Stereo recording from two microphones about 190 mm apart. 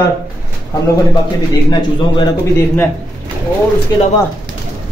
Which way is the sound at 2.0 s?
25° left (ahead or behind).